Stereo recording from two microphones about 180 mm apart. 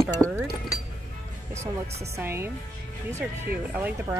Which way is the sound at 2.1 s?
15° right (ahead or behind).